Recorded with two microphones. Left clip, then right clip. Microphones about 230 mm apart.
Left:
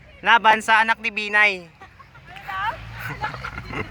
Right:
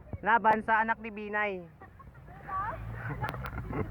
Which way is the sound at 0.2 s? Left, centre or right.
Centre.